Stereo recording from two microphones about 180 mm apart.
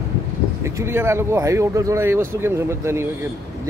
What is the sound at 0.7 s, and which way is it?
Speech, 15° right (ahead or behind).